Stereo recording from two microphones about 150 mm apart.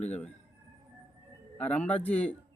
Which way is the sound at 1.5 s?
10° left (ahead or behind).